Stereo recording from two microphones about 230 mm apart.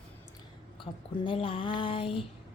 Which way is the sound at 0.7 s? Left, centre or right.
Left.